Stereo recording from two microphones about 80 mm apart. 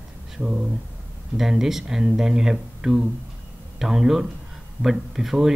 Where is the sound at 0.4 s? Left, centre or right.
Centre.